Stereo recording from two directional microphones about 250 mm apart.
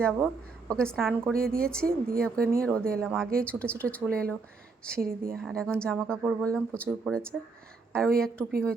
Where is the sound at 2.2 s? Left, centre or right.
Centre.